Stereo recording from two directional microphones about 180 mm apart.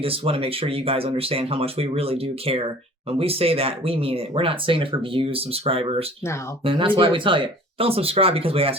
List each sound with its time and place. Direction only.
0.0 s speech: 30° right (ahead or behind)